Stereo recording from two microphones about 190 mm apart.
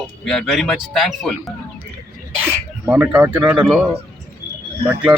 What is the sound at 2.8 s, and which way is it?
Speech, 10° right (ahead or behind).